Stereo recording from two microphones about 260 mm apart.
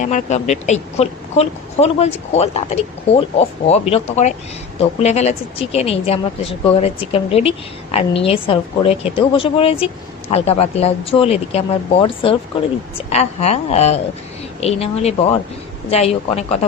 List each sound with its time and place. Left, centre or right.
0.0 s speech: left